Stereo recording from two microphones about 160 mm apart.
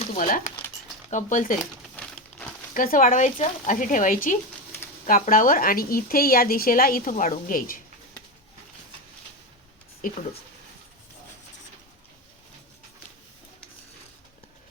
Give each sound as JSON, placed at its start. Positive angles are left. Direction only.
{"t": 0.2, "sound": "speech", "side_deg": 55}
{"t": 2.0, "sound": "crumpling", "side_deg": 5}
{"t": 2.7, "sound": "speech", "side_deg": 60}
{"t": 10.0, "sound": "speech", "side_deg": 55}